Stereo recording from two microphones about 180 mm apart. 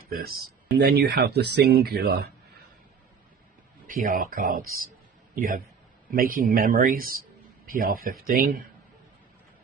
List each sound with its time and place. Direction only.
0.1 s speech: 55° right (ahead or behind)
3.8 s a man's voice: 50° right (ahead or behind)